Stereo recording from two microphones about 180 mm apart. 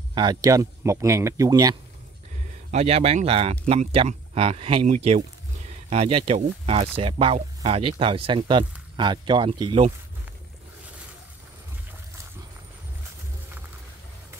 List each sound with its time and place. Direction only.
0.1 s speech: 25° right (ahead or behind)
2.7 s speech: 35° right (ahead or behind)
5.9 s speech: 30° right (ahead or behind)